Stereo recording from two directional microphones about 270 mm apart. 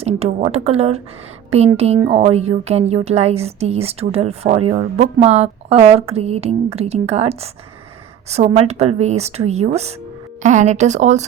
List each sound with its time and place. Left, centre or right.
0.0 s a woman's voice: right